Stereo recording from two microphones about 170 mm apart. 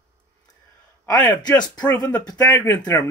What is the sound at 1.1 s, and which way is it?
Speech, 20° left (ahead or behind).